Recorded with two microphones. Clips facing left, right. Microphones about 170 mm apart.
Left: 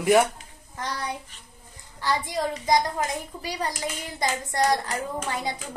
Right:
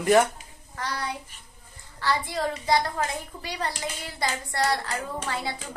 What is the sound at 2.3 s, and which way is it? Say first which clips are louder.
A child's voice: left 1 dB; 15° left (ahead or behind).